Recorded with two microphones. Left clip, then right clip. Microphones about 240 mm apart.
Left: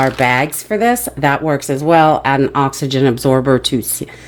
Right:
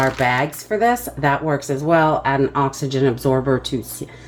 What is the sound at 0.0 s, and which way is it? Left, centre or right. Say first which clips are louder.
Speech: left 4 dB; left.